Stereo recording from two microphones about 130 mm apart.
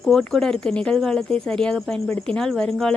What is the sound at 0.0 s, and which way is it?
A woman's voice, 5° left (ahead or behind).